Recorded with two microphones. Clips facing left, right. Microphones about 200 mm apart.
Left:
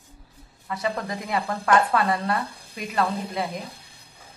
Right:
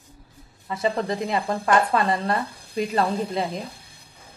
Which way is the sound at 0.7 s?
25° right (ahead or behind).